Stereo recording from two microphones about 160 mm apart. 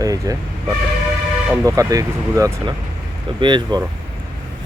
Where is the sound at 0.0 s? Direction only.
20° right (ahead or behind).